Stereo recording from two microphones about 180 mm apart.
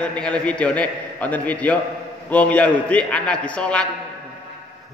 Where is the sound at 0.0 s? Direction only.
5° left (ahead or behind).